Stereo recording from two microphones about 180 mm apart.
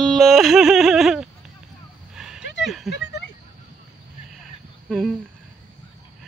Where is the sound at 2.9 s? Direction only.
75° left (ahead or behind).